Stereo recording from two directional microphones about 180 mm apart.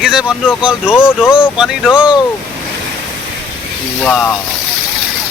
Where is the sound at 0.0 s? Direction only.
5° right (ahead or behind).